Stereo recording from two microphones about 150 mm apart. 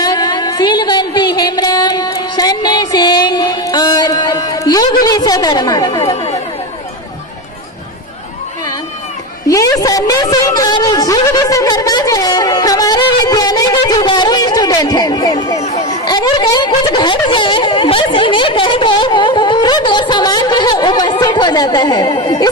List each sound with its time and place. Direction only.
0.0 s music: 25° left (ahead or behind)
5.0 s a woman's voice: 25° left (ahead or behind)
9.5 s a sound: 20° left (ahead or behind)